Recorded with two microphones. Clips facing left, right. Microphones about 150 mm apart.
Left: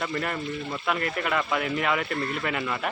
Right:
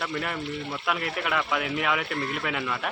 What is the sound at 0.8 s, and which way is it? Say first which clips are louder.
Speech: left 2 dB; centre (ahead or behind).